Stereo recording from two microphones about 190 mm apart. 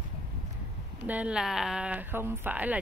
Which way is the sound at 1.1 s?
5° right (ahead or behind).